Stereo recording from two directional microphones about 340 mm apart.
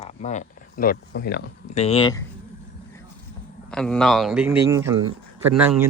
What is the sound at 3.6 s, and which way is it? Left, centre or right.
A man's voice, centre.